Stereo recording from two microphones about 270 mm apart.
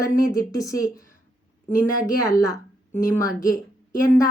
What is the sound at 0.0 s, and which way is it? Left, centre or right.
A woman's voice, centre.